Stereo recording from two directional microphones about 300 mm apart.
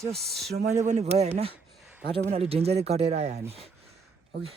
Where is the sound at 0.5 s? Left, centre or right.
Right.